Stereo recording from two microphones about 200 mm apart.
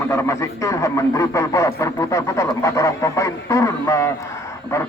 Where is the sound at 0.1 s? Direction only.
15° left (ahead or behind).